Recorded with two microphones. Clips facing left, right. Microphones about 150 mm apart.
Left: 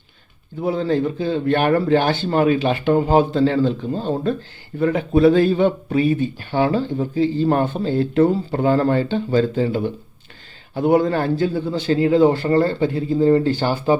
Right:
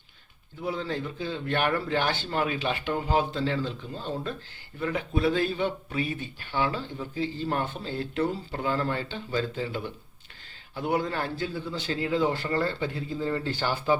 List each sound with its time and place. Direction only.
0.6 s speech: 40° left (ahead or behind)
4.8 s speech: 40° left (ahead or behind)